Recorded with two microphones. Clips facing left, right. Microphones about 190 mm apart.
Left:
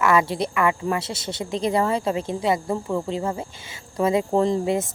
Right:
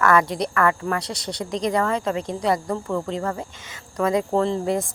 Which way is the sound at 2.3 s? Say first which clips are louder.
Right 1 dB; centre (ahead or behind).